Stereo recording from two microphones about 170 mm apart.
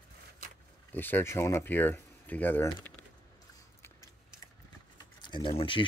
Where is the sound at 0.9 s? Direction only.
10° left (ahead or behind).